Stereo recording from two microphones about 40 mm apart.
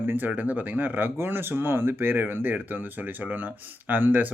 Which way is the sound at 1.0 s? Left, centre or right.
Right.